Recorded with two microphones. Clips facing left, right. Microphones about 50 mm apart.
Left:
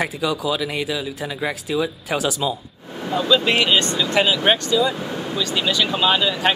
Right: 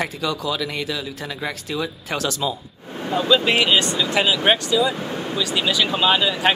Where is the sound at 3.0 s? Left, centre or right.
Centre.